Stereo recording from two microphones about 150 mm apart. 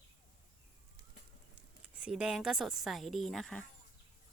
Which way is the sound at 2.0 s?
5° right (ahead or behind).